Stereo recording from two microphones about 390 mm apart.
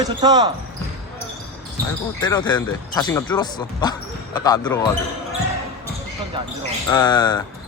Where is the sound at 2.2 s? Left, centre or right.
Centre.